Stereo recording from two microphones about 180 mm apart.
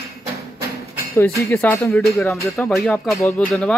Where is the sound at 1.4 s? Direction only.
10° left (ahead or behind).